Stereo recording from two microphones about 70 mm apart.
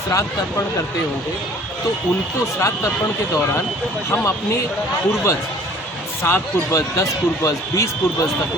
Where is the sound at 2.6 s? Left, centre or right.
Left.